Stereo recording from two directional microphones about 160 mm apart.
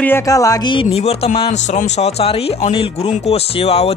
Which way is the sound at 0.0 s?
15° left (ahead or behind).